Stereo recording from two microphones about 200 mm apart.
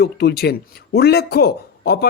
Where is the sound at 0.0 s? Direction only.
55° left (ahead or behind).